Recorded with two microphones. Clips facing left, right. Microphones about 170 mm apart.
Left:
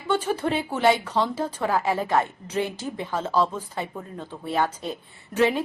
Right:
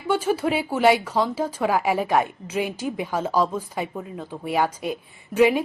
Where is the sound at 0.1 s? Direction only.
10° right (ahead or behind).